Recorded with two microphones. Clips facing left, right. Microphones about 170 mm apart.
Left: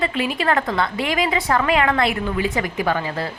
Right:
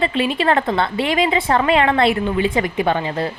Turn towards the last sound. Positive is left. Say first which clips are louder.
# right 3 dB
turn(degrees=-20)  # may be behind; listen again after turning